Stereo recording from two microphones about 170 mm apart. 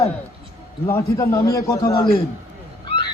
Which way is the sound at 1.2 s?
20° left (ahead or behind).